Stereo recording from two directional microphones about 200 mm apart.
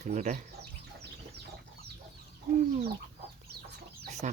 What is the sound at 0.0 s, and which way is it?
Speech, 35° right (ahead or behind).